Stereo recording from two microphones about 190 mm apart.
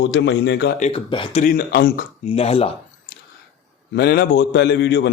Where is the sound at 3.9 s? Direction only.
60° left (ahead or behind).